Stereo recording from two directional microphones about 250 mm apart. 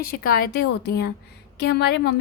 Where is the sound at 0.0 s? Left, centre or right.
Left.